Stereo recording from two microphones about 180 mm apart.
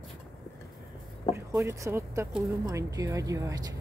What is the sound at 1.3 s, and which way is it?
Speech, 15° right (ahead or behind).